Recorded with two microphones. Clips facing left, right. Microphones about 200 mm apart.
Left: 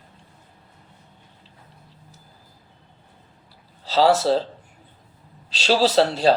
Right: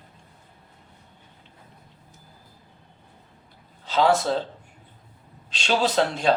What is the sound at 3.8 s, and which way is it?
Speech, 35° left (ahead or behind).